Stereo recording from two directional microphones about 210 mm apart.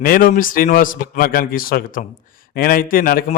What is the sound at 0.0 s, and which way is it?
A man's voice, 45° left (ahead or behind).